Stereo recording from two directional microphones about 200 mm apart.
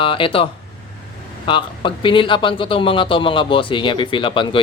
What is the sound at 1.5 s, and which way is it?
A man's voice, 25° left (ahead or behind).